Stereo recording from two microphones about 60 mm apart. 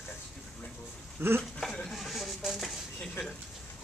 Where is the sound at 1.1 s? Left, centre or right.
Right.